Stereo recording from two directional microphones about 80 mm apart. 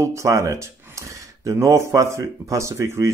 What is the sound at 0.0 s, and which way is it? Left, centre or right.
Speech, right.